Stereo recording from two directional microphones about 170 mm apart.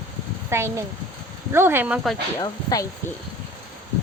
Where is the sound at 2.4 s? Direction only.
20° left (ahead or behind).